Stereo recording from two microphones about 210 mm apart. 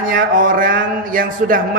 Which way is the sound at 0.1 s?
40° right (ahead or behind).